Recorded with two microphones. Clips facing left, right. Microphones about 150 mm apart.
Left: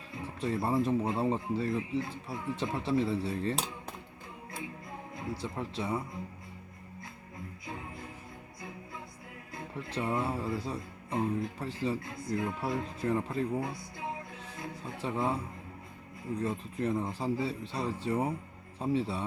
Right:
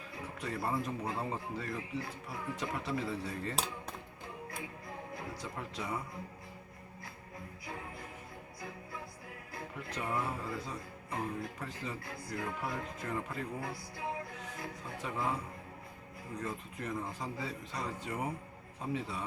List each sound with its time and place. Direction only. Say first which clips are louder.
0.3 s speech: left 6 dB; 25° left (ahead or behind)
5.1 s speech: left 7 dB; 30° left (ahead or behind)
9.6 s speech: left 5 dB; 25° left (ahead or behind)
16.4 s speech: left 7 dB; 30° left (ahead or behind)